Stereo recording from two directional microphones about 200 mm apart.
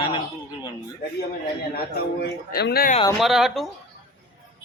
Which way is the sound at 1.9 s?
50° left (ahead or behind).